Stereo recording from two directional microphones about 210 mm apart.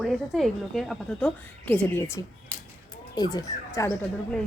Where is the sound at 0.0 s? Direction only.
Centre (ahead or behind).